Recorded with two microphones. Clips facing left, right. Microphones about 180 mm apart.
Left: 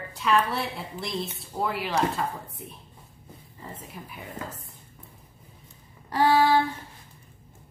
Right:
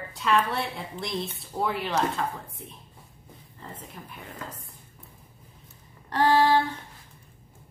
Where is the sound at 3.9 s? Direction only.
5° left (ahead or behind).